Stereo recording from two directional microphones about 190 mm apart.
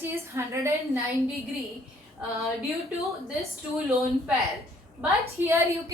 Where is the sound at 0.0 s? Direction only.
15° right (ahead or behind).